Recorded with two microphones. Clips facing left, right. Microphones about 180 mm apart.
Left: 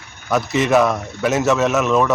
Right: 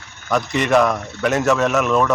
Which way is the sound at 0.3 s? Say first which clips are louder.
Left 1 dB; centre (ahead or behind).